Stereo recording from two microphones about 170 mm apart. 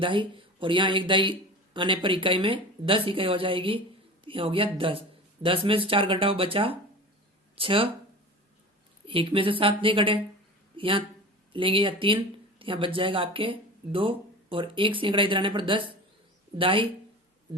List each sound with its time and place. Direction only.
0.0 s speech: 30° right (ahead or behind)
9.0 s speech: 30° right (ahead or behind)